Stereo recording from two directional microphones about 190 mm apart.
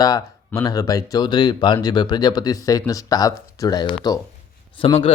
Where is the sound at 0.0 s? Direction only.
20° left (ahead or behind).